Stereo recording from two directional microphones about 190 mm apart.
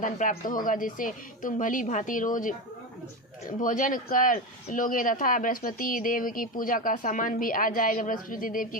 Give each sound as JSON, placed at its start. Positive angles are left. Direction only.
{"t": 0.0, "sound": "speech", "side_deg": 45}
{"t": 3.6, "sound": "speech", "side_deg": 45}